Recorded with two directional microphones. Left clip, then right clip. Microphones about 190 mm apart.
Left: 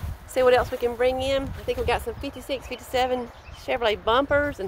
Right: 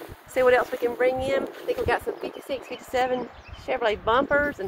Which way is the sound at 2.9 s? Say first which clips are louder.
Left 1 dB; 10° left (ahead or behind).